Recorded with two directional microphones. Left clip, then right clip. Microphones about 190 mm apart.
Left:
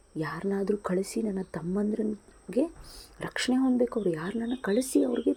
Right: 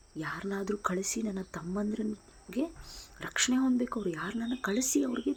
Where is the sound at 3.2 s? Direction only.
10° left (ahead or behind).